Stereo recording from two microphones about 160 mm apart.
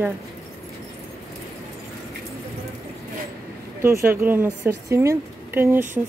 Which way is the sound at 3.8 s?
15° right (ahead or behind).